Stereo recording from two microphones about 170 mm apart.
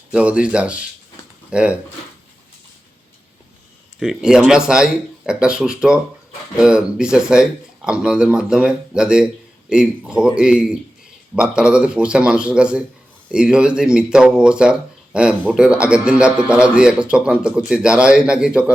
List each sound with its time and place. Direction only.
0.1 s speech: 5° right (ahead or behind)
4.0 s speech: 5° right (ahead or behind)